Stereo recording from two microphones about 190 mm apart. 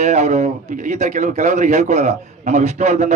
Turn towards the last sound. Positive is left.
turn(degrees=-35)  # may be behind; listen again after turning